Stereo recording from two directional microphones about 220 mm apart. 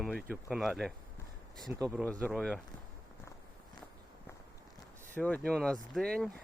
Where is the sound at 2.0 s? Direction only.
5° left (ahead or behind).